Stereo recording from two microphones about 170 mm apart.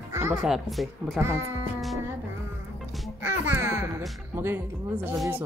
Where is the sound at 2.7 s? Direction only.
Centre (ahead or behind).